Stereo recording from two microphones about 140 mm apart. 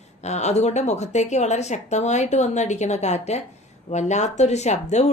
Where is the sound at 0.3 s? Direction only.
55° left (ahead or behind).